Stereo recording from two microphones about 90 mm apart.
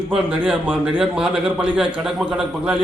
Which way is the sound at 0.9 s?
10° right (ahead or behind).